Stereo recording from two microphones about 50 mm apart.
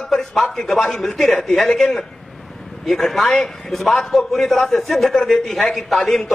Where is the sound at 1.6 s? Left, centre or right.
Centre.